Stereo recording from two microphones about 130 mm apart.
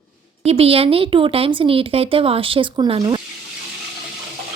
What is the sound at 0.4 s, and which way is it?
A woman's voice, 50° right (ahead or behind).